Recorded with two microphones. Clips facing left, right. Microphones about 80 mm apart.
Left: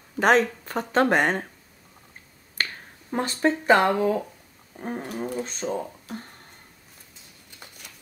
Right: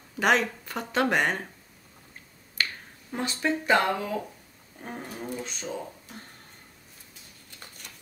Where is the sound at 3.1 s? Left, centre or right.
Left.